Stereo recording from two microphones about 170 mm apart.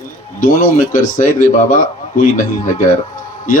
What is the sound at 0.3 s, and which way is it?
A man's voice, 50° left (ahead or behind).